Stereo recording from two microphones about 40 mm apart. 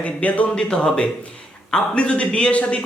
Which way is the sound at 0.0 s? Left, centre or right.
Left.